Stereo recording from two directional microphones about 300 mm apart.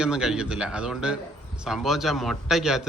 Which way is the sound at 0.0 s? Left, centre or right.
Centre.